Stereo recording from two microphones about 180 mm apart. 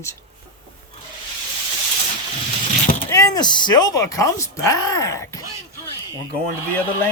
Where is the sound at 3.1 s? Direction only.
20° left (ahead or behind).